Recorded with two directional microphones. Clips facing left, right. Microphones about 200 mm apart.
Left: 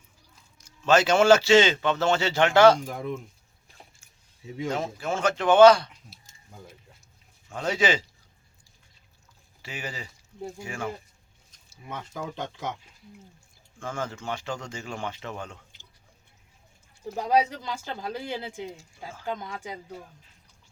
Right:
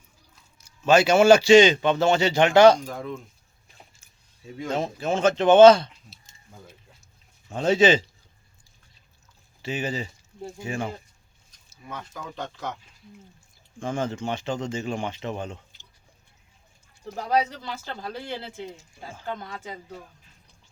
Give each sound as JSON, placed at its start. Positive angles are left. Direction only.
{"t": 0.6, "sound": "a man's voice", "side_deg": -10}
{"t": 2.8, "sound": "speech", "side_deg": 15}
{"t": 4.0, "sound": "keys jangling", "side_deg": -20}
{"t": 4.7, "sound": "speech", "side_deg": -20}
{"t": 7.5, "sound": "speech", "side_deg": -25}
{"t": 9.6, "sound": "speech", "side_deg": -25}
{"t": 11.9, "sound": "speech", "side_deg": 20}
{"t": 13.7, "sound": "speech", "side_deg": -20}
{"t": 17.2, "sound": "speech", "side_deg": 10}
{"t": 18.8, "sound": "a man's voice", "side_deg": -15}
{"t": 19.2, "sound": "speech", "side_deg": 15}